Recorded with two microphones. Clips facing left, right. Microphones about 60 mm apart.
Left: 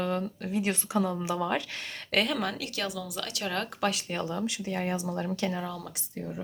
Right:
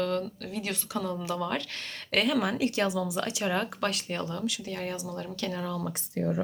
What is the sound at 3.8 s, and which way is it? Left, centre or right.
Speech, centre.